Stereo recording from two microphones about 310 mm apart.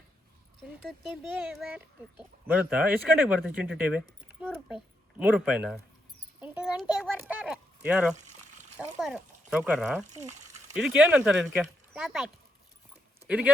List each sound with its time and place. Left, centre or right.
0.9 s a child's voice: centre
8.1 s pour: right
9.0 s a child's voice: centre
10.1 s a sound: right
10.8 s a child's voice: centre